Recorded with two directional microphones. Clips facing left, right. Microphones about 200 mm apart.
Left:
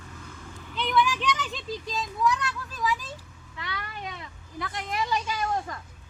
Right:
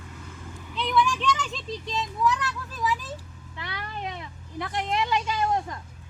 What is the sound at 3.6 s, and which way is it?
Cat, 25° right (ahead or behind).